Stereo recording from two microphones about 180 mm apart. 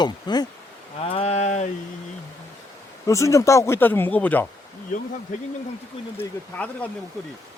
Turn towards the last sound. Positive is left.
turn(degrees=10)  # may be behind; listen again after turning